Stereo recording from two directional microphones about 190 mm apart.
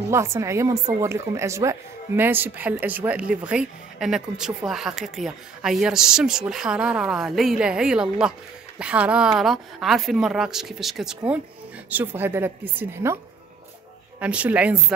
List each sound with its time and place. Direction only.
0.1 s a woman's voice: 15° right (ahead or behind)
14.2 s a woman's voice: 5° right (ahead or behind)